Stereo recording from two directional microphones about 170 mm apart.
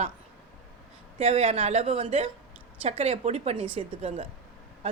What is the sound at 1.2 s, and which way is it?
A woman's voice, 35° right (ahead or behind).